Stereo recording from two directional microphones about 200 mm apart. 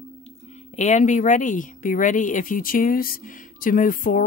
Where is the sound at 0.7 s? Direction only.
35° left (ahead or behind).